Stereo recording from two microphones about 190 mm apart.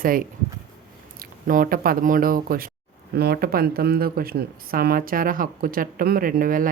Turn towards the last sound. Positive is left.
turn(degrees=-45)  # may be behind; listen again after turning